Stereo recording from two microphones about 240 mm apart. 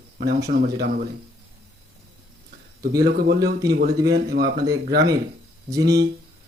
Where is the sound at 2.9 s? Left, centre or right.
Right.